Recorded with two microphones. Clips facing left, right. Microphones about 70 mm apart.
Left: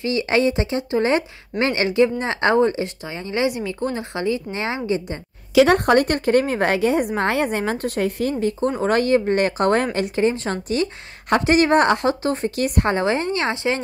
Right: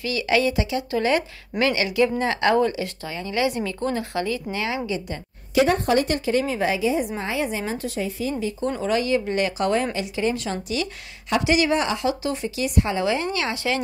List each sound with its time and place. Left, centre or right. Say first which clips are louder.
0.0 s speech: left 3 dB; left
3.5 s speech: left 1 dB; centre; by 5.0 s left
5.5 s speech: left 5 dB; left
5.9 s a woman's voice: left 4 dB; left